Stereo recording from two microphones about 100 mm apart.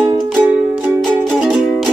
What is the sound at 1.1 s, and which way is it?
Music, centre (ahead or behind).